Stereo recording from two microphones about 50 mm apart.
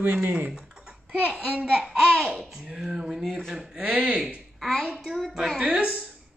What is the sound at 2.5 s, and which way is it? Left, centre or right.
Speech, centre.